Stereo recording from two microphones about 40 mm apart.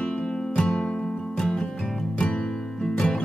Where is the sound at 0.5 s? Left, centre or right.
Left.